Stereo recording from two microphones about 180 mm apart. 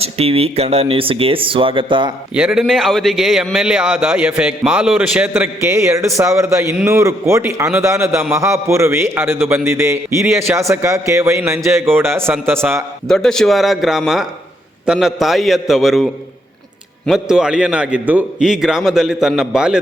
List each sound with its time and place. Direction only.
0.0 s speech: 35° right (ahead or behind)
2.3 s a man's voice: 5° right (ahead or behind)
13.1 s a man's voice: 5° left (ahead or behind)
17.1 s a man's voice: 5° right (ahead or behind)